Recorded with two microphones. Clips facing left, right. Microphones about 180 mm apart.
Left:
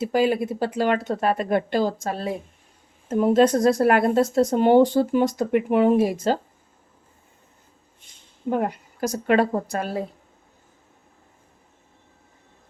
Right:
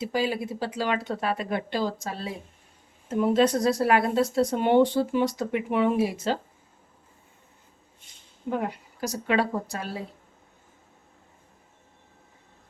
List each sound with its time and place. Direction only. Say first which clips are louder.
0.0 s speech: left 6 dB; 50° left (ahead or behind)
8.4 s speech: left 5 dB; 45° left (ahead or behind)